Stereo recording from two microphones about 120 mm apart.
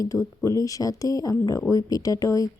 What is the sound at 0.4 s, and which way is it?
Speech, 30° left (ahead or behind).